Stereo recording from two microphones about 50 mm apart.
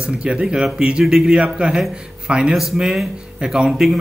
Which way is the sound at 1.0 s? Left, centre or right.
Centre.